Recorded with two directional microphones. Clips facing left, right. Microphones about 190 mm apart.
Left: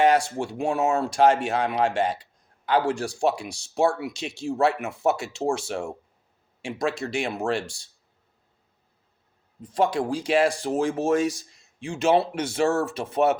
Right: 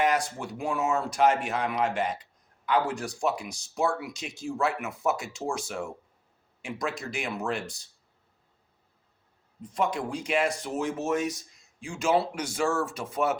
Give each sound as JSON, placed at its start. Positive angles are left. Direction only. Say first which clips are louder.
{"t": 0.0, "sound": "speech", "louder": "left 6 dB", "side_deg": 30}
{"t": 9.7, "sound": "speech", "louder": "left 5 dB", "side_deg": 30}